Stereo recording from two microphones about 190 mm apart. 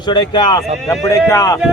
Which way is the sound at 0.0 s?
25° left (ahead or behind).